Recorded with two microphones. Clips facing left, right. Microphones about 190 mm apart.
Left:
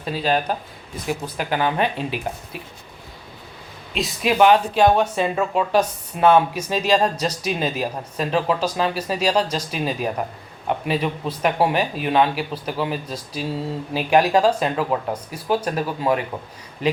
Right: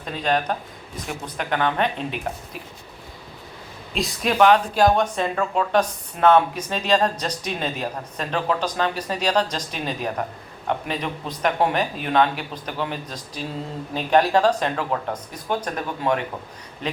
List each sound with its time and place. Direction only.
0.0 s speech: 5° left (ahead or behind)
3.9 s speech: centre (ahead or behind)